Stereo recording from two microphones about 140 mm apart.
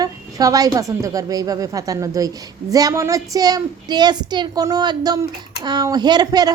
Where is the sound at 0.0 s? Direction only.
25° right (ahead or behind).